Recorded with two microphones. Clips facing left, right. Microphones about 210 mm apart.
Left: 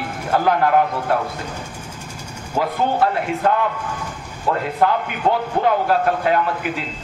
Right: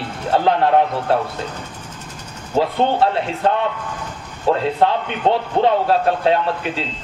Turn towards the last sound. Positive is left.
turn(degrees=-30)  # may be behind; listen again after turning